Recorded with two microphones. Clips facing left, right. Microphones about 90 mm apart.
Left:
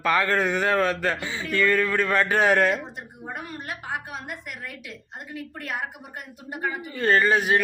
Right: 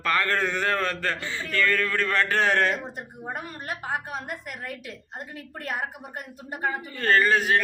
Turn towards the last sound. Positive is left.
turn(degrees=15)  # may be behind; listen again after turning